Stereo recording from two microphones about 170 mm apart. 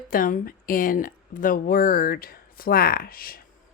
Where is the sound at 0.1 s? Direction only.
55° left (ahead or behind).